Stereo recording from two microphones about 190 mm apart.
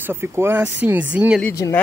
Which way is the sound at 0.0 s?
10° right (ahead or behind).